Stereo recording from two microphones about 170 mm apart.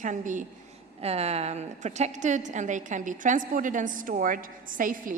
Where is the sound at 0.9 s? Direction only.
35° right (ahead or behind).